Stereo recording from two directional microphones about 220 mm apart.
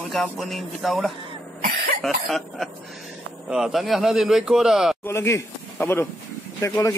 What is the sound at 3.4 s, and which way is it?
Speech, centre (ahead or behind).